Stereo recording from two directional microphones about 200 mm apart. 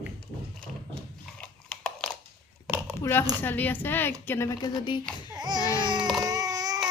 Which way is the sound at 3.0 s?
10° left (ahead or behind).